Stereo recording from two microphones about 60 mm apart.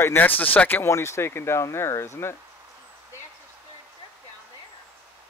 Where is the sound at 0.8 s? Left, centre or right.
Left.